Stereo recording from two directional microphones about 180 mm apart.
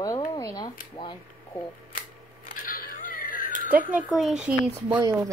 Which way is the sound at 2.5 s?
50° left (ahead or behind).